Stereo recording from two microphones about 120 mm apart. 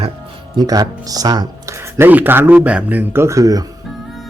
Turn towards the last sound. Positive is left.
turn(degrees=-30)  # may be behind; listen again after turning